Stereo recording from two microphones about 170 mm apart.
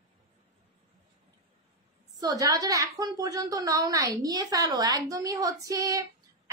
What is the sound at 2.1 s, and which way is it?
A woman's voice, 20° right (ahead or behind).